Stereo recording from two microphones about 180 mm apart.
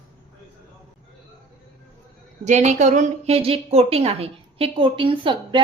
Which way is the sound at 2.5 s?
40° right (ahead or behind).